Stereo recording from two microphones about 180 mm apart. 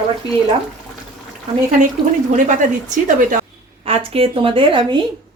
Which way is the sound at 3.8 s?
35° right (ahead or behind).